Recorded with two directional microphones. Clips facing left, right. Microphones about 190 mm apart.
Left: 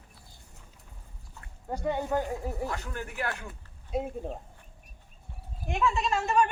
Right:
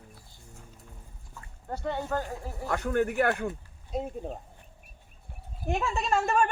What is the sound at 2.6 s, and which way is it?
Speech, 60° right (ahead or behind).